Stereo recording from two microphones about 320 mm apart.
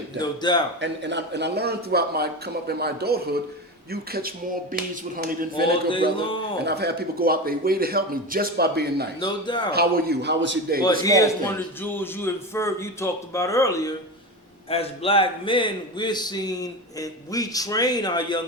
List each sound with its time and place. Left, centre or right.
0.2 s a man's voice: centre
0.8 s a man's voice: right
5.9 s a man's voice: centre
6.6 s a man's voice: right
9.2 s a man's voice: centre
9.7 s a man's voice: right
11.0 s a man's voice: centre